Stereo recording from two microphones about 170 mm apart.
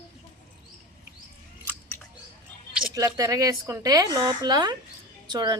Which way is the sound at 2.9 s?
20° right (ahead or behind).